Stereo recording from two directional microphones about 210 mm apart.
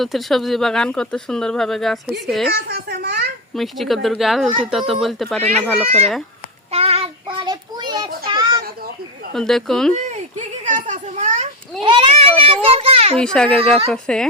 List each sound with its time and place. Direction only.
0.0 s speech: centre (ahead or behind)
2.6 s a child's voice: 45° right (ahead or behind)
3.5 s speech: centre (ahead or behind)
6.7 s child singing: 30° right (ahead or behind)
9.3 s speech: centre (ahead or behind)
9.9 s a sound: 35° right (ahead or behind)
11.8 s a child's voice: 25° right (ahead or behind)
13.1 s speech: 5° left (ahead or behind)